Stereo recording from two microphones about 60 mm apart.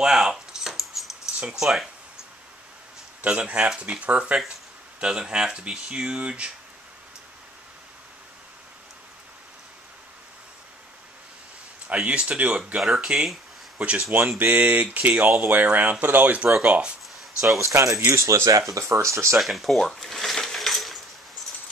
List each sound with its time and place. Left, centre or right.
0.0 s keys jangling: centre
1.4 s speech: centre
3.2 s speech: right
11.9 s speech: centre
13.7 s speech: right
17.6 s speech: right
18.9 s speech: right
19.3 s coin: centre